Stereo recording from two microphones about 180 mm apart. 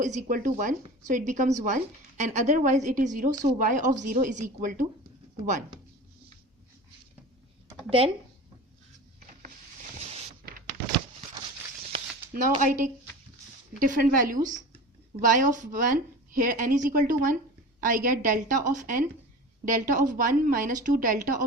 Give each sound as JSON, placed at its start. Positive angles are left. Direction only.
{"t": 0.0, "sound": "a woman's voice", "side_deg": -45}
{"t": 7.9, "sound": "speech", "side_deg": -30}
{"t": 10.0, "sound": "vehicle", "side_deg": -35}
{"t": 11.9, "sound": "a sound", "side_deg": -40}
{"t": 13.7, "sound": "a woman's voice", "side_deg": -45}